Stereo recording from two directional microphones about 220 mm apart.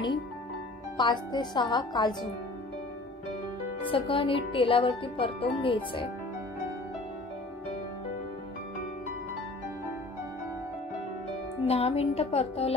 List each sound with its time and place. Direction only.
0.9 s speech: 20° left (ahead or behind)
3.9 s speech: 25° left (ahead or behind)
11.6 s speech: 25° left (ahead or behind)